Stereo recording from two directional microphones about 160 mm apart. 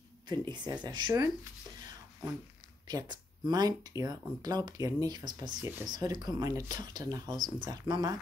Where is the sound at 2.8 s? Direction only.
25° right (ahead or behind).